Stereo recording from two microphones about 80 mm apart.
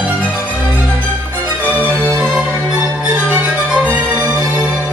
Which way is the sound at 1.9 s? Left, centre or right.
Centre.